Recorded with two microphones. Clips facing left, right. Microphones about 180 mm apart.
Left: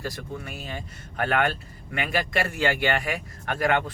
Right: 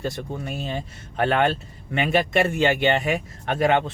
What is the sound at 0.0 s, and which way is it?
Speech, 25° right (ahead or behind).